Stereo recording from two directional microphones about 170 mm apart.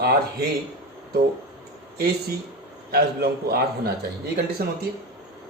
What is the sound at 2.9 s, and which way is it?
Speech, 65° right (ahead or behind).